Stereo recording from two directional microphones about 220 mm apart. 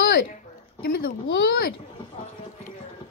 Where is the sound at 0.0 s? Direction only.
55° left (ahead or behind).